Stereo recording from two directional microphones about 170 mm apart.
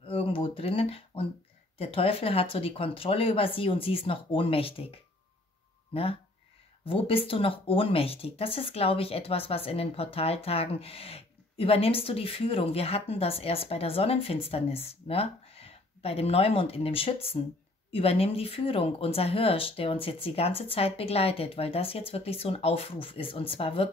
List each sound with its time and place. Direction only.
0.0 s a sound: 30° left (ahead or behind)
1.8 s speech: 35° left (ahead or behind)
6.9 s speech: 35° left (ahead or behind)